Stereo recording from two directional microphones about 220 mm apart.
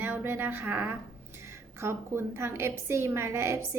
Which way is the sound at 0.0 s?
10° right (ahead or behind).